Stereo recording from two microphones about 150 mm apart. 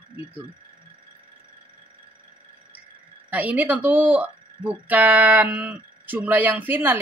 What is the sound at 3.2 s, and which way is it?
Speech, 10° right (ahead or behind).